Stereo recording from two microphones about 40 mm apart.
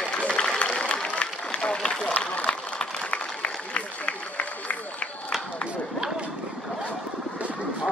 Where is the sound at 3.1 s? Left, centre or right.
Left.